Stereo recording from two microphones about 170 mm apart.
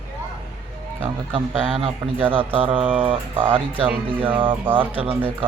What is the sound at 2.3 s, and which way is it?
Speech, 30° right (ahead or behind).